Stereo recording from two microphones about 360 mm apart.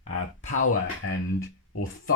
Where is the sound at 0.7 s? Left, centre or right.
Left.